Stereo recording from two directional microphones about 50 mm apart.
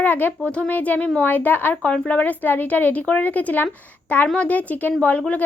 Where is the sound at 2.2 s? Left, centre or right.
Left.